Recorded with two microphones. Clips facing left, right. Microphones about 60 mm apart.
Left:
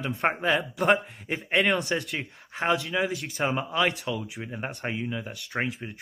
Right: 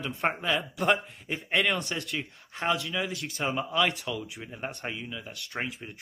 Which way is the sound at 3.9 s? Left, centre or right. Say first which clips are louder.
Left 3 dB; centre.